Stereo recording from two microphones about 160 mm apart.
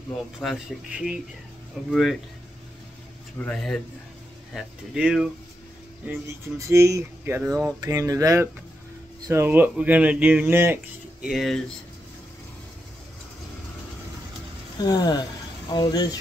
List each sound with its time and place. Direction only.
0.4 s speech: 5° right (ahead or behind)
3.3 s speech: 5° left (ahead or behind)
6.0 s speech: 15° right (ahead or behind)
7.6 s a sound: 20° right (ahead or behind)
9.3 s speech: 15° right (ahead or behind)
11.2 s speech: centre (ahead or behind)
14.9 s speech: 25° left (ahead or behind)